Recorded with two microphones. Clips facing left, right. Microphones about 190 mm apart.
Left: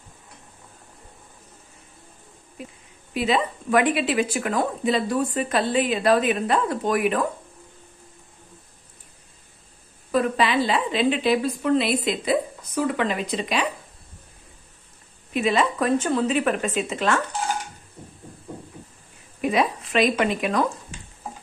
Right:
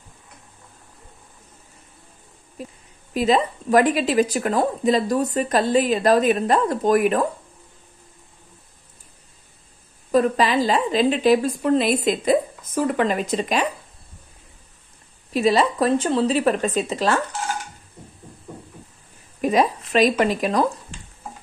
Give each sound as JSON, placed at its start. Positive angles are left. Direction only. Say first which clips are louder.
{"t": 3.1, "sound": "speech", "louder": "right 4 dB", "side_deg": -40}
{"t": 10.1, "sound": "a woman's voice", "louder": "right 3 dB", "side_deg": -40}
{"t": 15.3, "sound": "speech", "louder": "right 3 dB", "side_deg": -35}
{"t": 19.4, "sound": "speech", "louder": "right 3 dB", "side_deg": -40}